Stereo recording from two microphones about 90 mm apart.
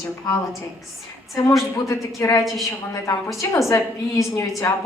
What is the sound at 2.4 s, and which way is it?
Speech, centre (ahead or behind).